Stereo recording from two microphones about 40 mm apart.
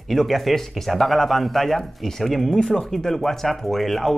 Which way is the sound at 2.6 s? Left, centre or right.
Centre.